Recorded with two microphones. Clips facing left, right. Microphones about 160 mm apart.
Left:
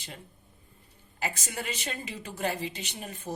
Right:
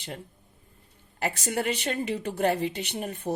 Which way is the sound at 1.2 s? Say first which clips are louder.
Right 7 dB; 60° right (ahead or behind).